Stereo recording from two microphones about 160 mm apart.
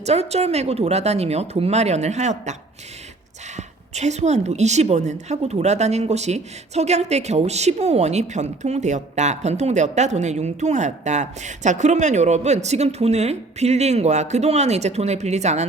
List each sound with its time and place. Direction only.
0.0 s a woman's voice: 40° right (ahead or behind)
3.9 s a woman's voice: 45° right (ahead or behind)